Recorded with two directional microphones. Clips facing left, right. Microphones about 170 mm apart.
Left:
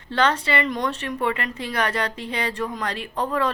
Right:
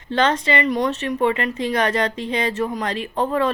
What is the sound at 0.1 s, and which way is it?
A woman's voice, 25° right (ahead or behind).